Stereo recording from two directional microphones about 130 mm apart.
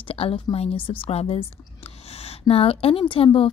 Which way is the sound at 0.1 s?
45° left (ahead or behind).